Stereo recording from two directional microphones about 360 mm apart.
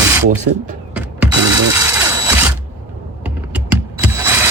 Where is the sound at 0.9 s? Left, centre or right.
Centre.